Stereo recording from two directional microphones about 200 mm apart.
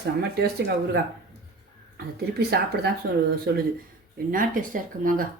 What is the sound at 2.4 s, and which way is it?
Speech, 55° right (ahead or behind).